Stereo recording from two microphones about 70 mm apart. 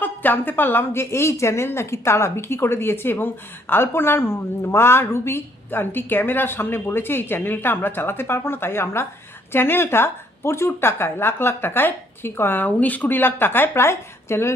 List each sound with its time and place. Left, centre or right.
0.0 s a woman's voice: left